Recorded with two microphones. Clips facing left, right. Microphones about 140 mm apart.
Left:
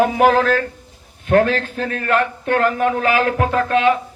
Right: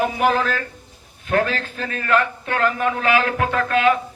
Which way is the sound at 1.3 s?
55° left (ahead or behind).